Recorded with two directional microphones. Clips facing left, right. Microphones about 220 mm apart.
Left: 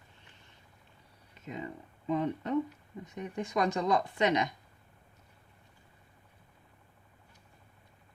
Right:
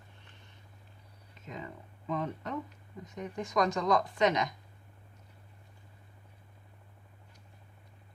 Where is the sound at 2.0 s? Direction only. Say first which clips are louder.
Left 4 dB; 25° left (ahead or behind).